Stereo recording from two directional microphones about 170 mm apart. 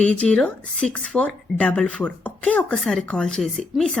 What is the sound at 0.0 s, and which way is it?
Speech, 5° left (ahead or behind).